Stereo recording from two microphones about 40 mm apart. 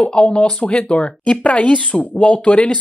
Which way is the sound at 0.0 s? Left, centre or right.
Left.